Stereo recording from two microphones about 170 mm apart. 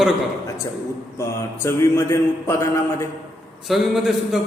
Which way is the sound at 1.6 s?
15° left (ahead or behind).